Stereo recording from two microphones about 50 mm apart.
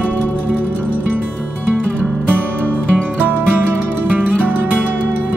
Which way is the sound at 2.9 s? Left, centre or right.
Right.